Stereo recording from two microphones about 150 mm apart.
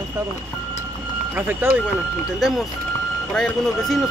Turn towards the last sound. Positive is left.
turn(degrees=5)  # may be behind; listen again after turning